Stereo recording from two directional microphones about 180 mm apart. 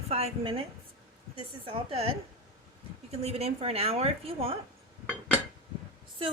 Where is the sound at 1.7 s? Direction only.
30° right (ahead or behind).